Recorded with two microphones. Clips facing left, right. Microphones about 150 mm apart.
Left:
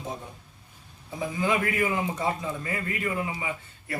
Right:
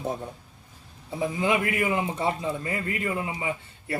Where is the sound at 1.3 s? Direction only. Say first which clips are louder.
Even; 20° right (ahead or behind).